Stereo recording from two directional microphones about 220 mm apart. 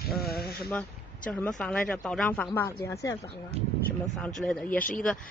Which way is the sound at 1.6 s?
5° left (ahead or behind).